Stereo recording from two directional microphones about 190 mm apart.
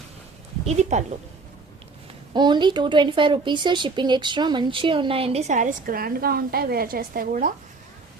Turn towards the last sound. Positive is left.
turn(degrees=-45)  # may be behind; listen again after turning